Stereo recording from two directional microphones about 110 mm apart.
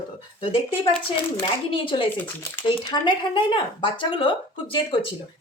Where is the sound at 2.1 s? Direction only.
15° left (ahead or behind).